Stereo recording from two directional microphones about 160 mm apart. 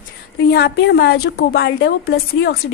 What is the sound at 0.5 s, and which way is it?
A woman's voice, 90° left.